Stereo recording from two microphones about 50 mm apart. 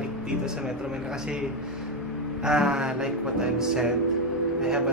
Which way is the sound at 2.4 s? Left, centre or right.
Centre.